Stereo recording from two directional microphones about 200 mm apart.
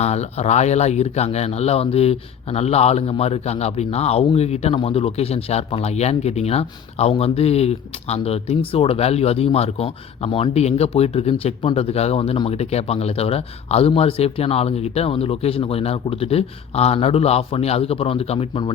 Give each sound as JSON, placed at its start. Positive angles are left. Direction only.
{"t": 0.0, "sound": "speech", "side_deg": 35}